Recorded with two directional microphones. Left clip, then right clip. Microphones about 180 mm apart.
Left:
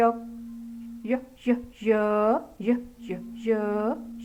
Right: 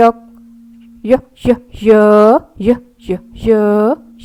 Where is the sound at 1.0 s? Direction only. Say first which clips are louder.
Right 17 dB; 50° right (ahead or behind).